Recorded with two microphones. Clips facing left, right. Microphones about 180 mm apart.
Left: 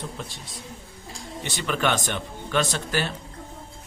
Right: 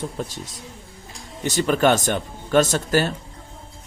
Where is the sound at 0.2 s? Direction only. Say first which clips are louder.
Right 7 dB; 40° right (ahead or behind).